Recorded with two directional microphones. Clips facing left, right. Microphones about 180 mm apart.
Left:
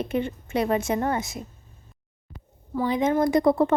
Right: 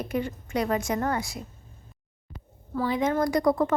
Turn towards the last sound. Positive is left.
turn(degrees=25)  # may be behind; listen again after turning